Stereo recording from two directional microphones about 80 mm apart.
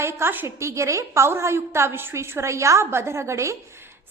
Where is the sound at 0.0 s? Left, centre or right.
Right.